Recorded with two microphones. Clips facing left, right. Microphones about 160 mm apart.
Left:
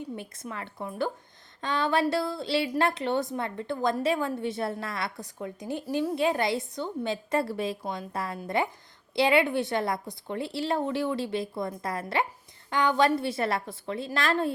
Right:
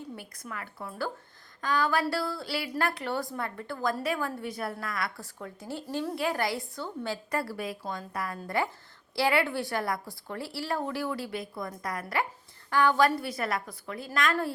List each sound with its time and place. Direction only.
0.2 s a woman's voice: 25° left (ahead or behind)